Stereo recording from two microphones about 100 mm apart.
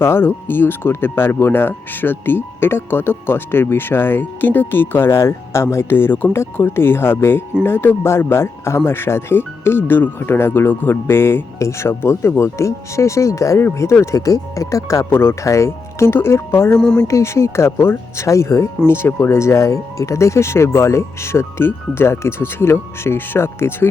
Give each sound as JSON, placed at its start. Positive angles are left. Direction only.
{"t": 0.0, "sound": "speech", "side_deg": 25}
{"t": 16.7, "sound": "speech", "side_deg": 10}
{"t": 17.1, "sound": "speech", "side_deg": 30}